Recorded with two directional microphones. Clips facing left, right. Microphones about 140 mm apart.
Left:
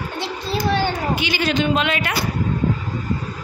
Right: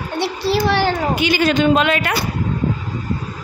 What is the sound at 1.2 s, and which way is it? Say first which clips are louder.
Speech: right 7 dB; 45° right (ahead or behind).